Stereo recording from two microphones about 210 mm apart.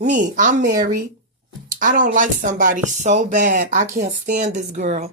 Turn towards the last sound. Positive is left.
turn(degrees=-30)  # may be behind; listen again after turning